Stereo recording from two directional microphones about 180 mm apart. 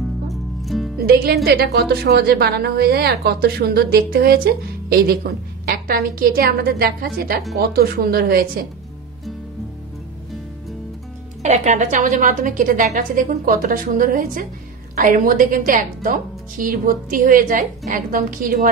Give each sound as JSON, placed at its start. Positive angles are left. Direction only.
{"t": 0.3, "sound": "music", "side_deg": 0}
{"t": 1.0, "sound": "a woman's voice", "side_deg": -60}
{"t": 11.4, "sound": "a woman's voice", "side_deg": -40}